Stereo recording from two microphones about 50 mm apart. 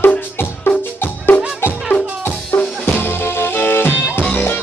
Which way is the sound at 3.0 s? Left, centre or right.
Left.